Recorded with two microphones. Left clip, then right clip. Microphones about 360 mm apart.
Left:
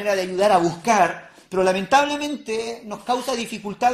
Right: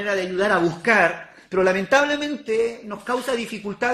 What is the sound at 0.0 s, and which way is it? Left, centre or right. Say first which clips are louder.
Speech: left 1 dB; centre.